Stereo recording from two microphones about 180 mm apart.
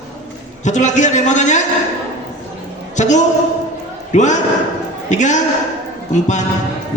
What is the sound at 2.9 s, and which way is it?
A woman's voice, 40° left (ahead or behind).